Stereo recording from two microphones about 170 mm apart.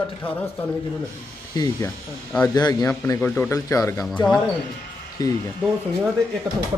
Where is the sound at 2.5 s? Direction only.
25° left (ahead or behind).